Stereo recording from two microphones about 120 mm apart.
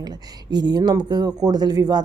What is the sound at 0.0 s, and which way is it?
A woman's voice, 35° right (ahead or behind).